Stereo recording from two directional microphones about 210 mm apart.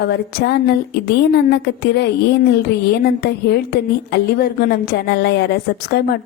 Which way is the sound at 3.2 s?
50° left (ahead or behind).